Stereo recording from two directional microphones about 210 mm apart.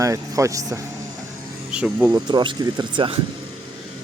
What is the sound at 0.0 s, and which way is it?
Speech, 15° right (ahead or behind).